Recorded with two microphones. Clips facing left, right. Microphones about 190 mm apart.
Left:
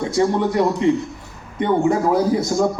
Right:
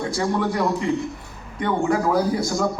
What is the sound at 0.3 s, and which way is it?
A man's voice, 20° left (ahead or behind).